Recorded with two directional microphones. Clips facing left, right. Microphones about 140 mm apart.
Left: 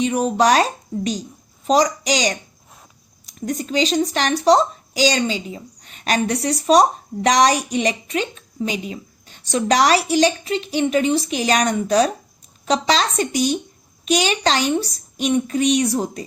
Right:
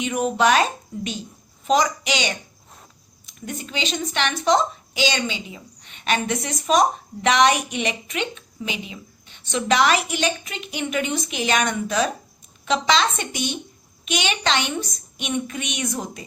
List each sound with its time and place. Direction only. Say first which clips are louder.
0.0 s speech: left 3 dB; 35° left (ahead or behind)